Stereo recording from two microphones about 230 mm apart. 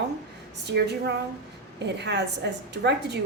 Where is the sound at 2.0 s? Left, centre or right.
Right.